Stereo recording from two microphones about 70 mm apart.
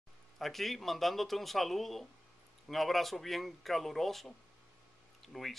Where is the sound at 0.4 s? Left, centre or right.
Centre.